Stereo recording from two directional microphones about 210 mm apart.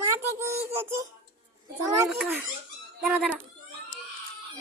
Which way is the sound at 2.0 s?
10° right (ahead or behind).